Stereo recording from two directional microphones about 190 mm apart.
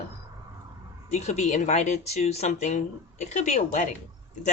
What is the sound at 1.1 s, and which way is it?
Speech, 35° left (ahead or behind).